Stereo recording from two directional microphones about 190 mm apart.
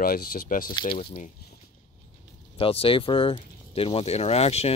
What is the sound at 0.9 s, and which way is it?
Speech, 35° left (ahead or behind).